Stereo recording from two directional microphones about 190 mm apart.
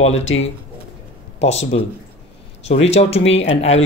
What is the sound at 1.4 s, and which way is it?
Speech, 35° left (ahead or behind).